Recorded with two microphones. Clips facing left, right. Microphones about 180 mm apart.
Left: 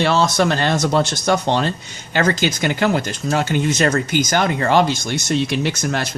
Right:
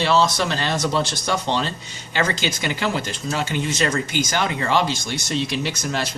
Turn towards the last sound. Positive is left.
turn(degrees=50)  # may be behind; listen again after turning